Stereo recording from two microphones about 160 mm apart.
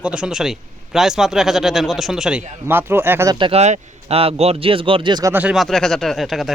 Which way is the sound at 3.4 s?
40° right (ahead or behind).